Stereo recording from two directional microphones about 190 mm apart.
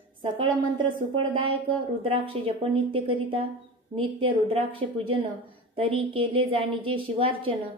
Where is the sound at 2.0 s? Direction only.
30° right (ahead or behind).